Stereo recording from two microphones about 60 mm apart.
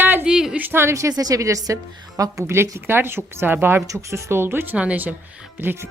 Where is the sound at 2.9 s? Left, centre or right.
Right.